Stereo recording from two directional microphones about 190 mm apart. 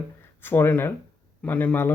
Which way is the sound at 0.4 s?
10° left (ahead or behind).